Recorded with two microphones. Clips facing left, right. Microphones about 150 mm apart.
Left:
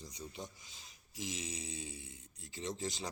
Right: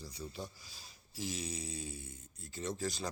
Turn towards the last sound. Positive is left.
turn(degrees=20)  # may be behind; listen again after turning